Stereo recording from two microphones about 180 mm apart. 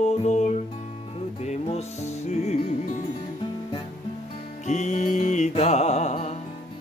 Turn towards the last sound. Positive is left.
turn(degrees=40)  # may be behind; listen again after turning